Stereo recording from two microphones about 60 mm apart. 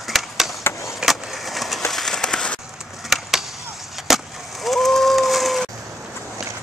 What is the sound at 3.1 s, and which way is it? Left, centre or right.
Skateboard, centre.